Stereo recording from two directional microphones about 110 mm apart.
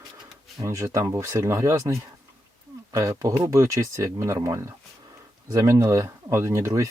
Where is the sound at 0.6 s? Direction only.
25° right (ahead or behind).